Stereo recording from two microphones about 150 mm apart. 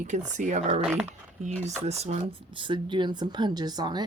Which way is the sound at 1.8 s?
45° right (ahead or behind).